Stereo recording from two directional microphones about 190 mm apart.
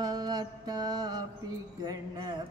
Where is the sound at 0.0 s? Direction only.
20° right (ahead or behind).